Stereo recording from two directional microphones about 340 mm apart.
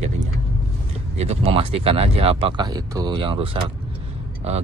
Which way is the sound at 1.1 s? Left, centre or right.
Centre.